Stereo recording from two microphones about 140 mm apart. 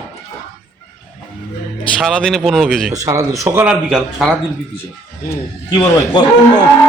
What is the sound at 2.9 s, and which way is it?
Speech, 25° right (ahead or behind).